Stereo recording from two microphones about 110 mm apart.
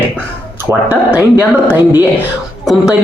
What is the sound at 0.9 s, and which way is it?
Speech, 15° right (ahead or behind).